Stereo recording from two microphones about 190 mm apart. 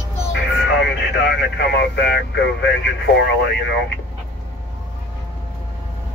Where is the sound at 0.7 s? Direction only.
65° left (ahead or behind).